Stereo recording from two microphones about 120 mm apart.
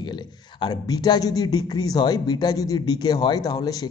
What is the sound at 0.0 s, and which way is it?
Speech, 40° left (ahead or behind).